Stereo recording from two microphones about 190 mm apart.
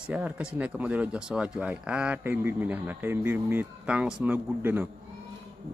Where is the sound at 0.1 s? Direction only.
5° right (ahead or behind).